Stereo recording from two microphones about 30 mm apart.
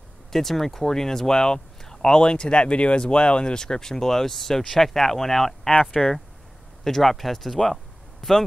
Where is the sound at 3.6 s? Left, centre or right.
Centre.